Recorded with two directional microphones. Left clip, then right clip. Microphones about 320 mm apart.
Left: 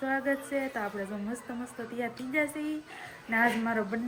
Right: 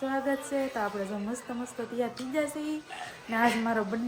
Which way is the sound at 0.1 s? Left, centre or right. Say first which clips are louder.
Left 3 dB; centre.